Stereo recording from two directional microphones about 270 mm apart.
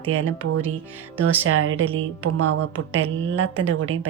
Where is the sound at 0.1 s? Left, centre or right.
Right.